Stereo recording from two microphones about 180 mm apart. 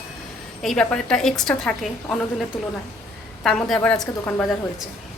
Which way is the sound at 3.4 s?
5° left (ahead or behind).